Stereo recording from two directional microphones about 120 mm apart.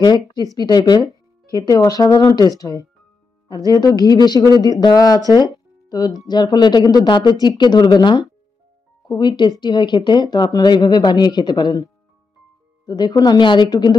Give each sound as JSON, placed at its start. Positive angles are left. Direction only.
{"t": 0.0, "sound": "speech", "side_deg": 35}
{"t": 12.8, "sound": "speech", "side_deg": 35}